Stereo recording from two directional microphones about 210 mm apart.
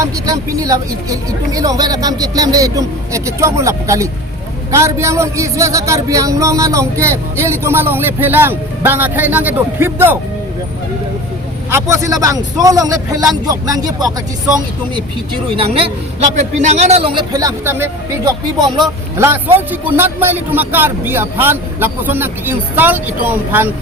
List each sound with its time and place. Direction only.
0.0 s speech: 15° right (ahead or behind)
11.7 s speech: 15° right (ahead or behind)
15.5 s a man's voice: 25° right (ahead or behind)
17.3 s speech: 15° right (ahead or behind)